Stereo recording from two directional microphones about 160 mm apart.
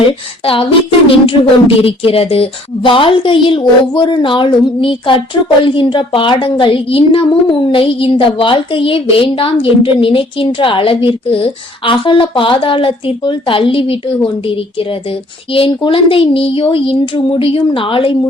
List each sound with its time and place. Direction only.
0.4 s speech: 35° left (ahead or behind)
15.5 s speech: 35° left (ahead or behind)